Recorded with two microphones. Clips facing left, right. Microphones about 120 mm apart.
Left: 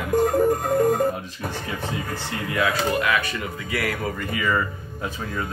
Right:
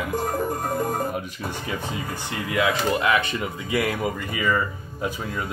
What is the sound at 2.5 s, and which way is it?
Speech, 20° right (ahead or behind).